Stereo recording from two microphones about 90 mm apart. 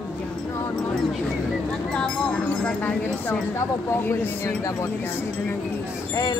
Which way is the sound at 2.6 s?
15° left (ahead or behind).